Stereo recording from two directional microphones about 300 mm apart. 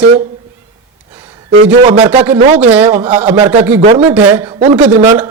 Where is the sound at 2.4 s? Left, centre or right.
Centre.